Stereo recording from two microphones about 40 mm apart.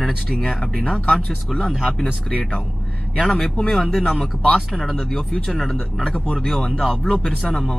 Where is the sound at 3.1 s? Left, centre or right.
Centre.